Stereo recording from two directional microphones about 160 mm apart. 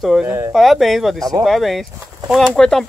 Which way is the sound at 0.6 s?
Centre (ahead or behind).